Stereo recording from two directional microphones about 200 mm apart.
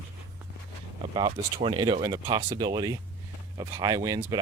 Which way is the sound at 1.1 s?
25° right (ahead or behind).